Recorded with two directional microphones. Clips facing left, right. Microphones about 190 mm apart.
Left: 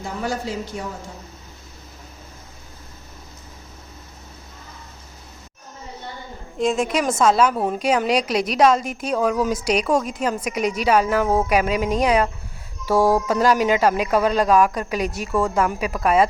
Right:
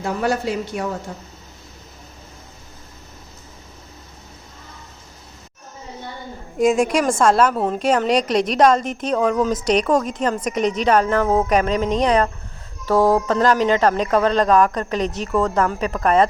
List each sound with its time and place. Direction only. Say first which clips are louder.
0.0 s a man's voice: right 5 dB; 65° right (ahead or behind)
6.6 s a woman's voice: right 4 dB; centre (ahead or behind)